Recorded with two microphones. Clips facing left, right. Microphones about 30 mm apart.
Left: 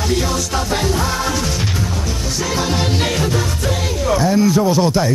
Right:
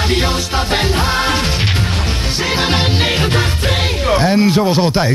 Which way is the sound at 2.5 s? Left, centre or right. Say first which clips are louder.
Right 3 dB; right.